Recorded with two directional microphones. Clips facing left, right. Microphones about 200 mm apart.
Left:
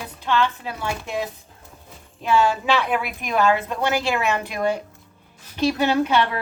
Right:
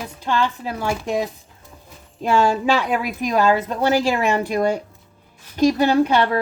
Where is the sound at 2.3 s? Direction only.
45° right (ahead or behind).